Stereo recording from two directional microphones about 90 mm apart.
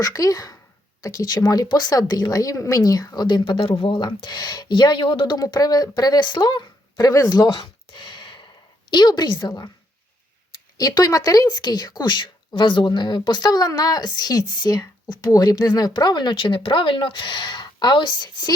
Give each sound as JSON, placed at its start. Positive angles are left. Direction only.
{"t": 0.0, "sound": "speech", "side_deg": 40}
{"t": 5.4, "sound": "speech", "side_deg": 45}
{"t": 10.8, "sound": "speech", "side_deg": 45}